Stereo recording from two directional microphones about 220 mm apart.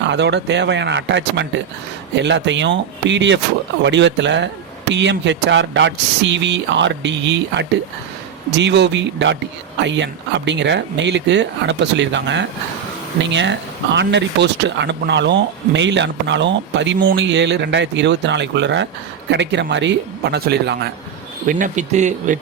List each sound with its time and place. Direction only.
0.1 s speech: 50° right (ahead or behind)
21.4 s speech: 35° right (ahead or behind)